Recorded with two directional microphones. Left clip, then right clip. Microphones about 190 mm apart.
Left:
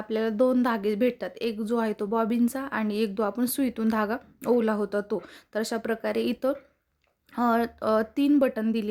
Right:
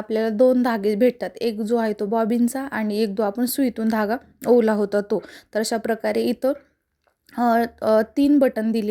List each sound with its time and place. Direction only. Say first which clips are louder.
0.1 s a woman's voice: right 6 dB; 15° right (ahead or behind)